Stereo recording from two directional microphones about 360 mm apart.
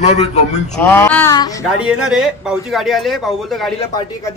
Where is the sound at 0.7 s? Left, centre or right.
Centre.